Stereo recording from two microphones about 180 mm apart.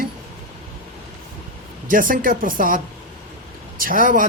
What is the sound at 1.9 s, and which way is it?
A man's voice, 50° right (ahead or behind).